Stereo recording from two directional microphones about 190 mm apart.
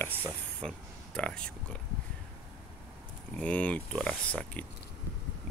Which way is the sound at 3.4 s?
5° left (ahead or behind).